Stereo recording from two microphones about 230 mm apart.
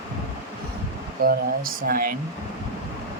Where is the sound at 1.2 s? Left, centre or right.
Right.